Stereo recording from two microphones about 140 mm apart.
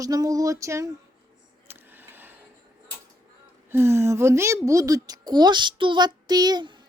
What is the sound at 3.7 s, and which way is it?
Speech, 20° right (ahead or behind).